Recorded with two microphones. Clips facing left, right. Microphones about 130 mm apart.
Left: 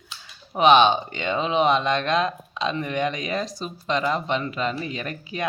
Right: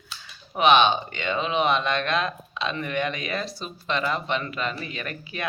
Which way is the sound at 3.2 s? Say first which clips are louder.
Left 3 dB; 35° left (ahead or behind).